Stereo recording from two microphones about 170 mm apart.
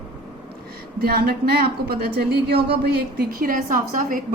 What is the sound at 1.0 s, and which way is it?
A woman's voice, 65° right (ahead or behind).